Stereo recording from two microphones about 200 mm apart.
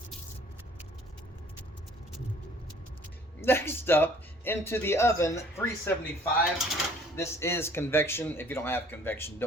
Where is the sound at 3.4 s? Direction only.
10° left (ahead or behind).